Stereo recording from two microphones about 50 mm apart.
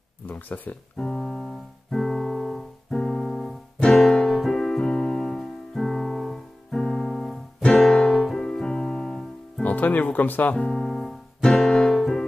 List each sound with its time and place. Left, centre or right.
0.3 s speech: left
0.9 s keyboard: centre
4.0 s piano: centre
4.3 s keyboard: centre
6.7 s music: centre
9.6 s music: left
10.7 s piano: centre
11.4 s music: centre